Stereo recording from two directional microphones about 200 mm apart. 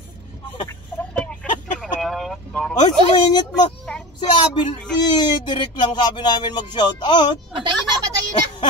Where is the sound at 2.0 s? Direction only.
Centre (ahead or behind).